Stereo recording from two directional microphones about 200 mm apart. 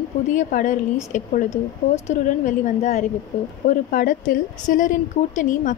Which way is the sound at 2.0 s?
40° left (ahead or behind).